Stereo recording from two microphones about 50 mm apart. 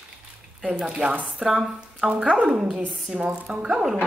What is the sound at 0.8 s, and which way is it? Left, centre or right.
Speech, centre.